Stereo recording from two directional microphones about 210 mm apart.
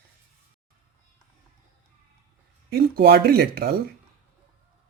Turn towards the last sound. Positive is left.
turn(degrees=-45)  # may be behind; listen again after turning